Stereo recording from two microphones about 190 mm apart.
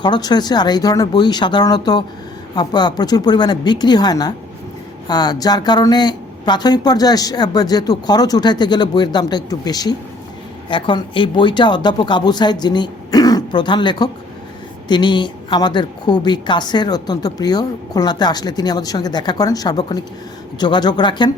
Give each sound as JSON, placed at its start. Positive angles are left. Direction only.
{"t": 0.0, "sound": "a woman's voice", "side_deg": 20}